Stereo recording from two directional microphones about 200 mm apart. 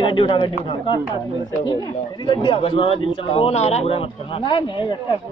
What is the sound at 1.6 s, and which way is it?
Speech, 20° left (ahead or behind).